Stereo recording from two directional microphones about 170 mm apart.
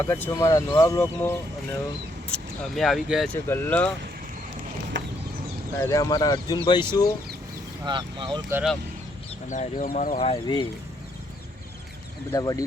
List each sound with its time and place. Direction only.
0.0 s speech: 15° left (ahead or behind)
2.3 s speech: centre (ahead or behind)
3.3 s speech: 15° left (ahead or behind)
4.9 s a sound: 90° right
5.8 s speech: 20° left (ahead or behind)
7.9 s speech: 30° right (ahead or behind)
9.5 s speech: 50° left (ahead or behind)
10.2 s speech: 30° left (ahead or behind)
12.3 s speech: 20° left (ahead or behind)